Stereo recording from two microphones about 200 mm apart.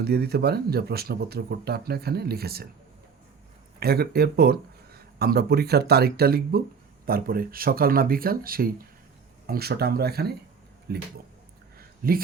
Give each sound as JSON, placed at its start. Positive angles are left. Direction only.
{"t": 0.0, "sound": "speech", "side_deg": -55}
{"t": 3.8, "sound": "speech", "side_deg": -50}